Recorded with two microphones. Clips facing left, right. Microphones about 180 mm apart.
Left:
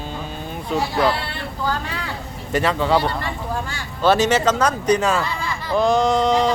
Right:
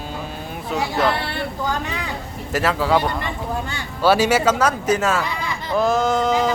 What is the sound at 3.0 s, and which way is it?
Speech, 20° right (ahead or behind).